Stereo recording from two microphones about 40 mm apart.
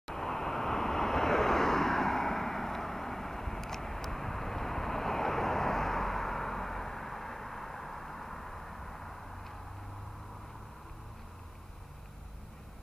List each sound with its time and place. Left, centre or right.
0.0 s vehicle: centre